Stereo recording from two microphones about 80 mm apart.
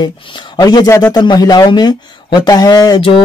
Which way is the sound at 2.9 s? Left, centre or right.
Left.